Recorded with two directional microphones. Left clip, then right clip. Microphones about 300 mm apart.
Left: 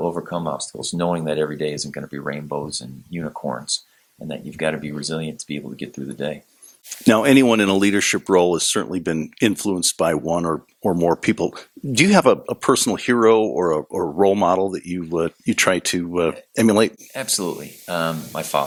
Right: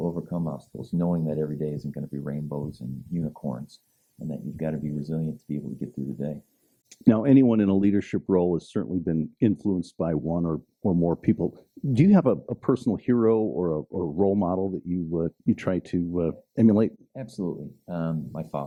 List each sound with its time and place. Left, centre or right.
0.1 s speech: centre
0.9 s speech: centre
14.3 s speech: centre